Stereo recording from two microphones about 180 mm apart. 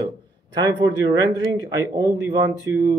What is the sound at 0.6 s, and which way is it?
Speech, 25° right (ahead or behind).